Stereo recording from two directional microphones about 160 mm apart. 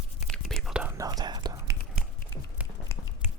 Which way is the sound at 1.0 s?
25° right (ahead or behind).